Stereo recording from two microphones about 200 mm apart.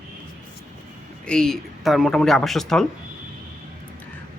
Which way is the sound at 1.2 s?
5° left (ahead or behind).